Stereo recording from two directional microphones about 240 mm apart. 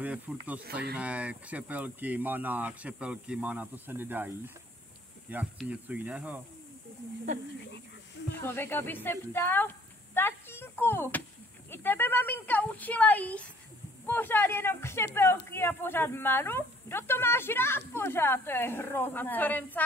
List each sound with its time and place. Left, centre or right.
0.0 s speech: centre
0.7 s speech: right
0.9 s speech: centre
5.3 s speech: centre
8.4 s speech: centre